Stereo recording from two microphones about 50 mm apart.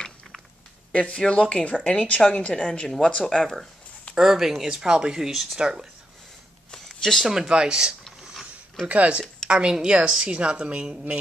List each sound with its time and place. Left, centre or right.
0.9 s speech: left
4.1 s speech: centre
6.7 s a sound: centre
7.2 s speech: centre
8.8 s speech: right
9.5 s speech: centre